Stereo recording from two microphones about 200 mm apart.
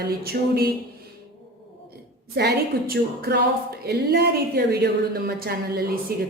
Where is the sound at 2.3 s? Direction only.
55° right (ahead or behind).